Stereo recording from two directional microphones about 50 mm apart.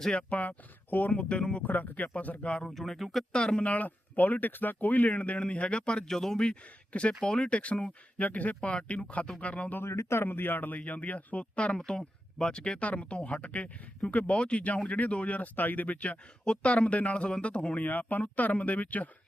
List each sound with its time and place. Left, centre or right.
0.0 s speech: left
1.1 s speech: left
1.6 s speech: left
2.6 s speech: centre
3.3 s speech: centre
3.7 s speech: left
9.7 s speech: left
10.2 s speech: left
16.4 s speech: left
17.8 s speech: left